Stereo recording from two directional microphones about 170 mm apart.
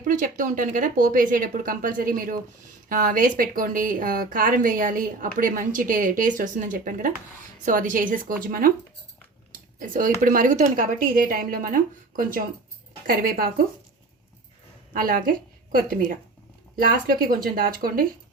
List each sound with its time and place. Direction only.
0.0 s a woman's voice: 50° right (ahead or behind)
9.5 s a sound: 50° right (ahead or behind)
10.2 s a woman's voice: 50° right (ahead or behind)
14.9 s a woman's voice: 55° right (ahead or behind)